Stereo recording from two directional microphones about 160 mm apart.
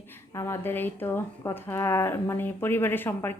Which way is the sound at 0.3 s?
15° left (ahead or behind).